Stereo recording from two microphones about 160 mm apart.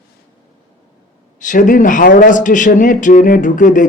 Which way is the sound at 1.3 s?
55° left (ahead or behind).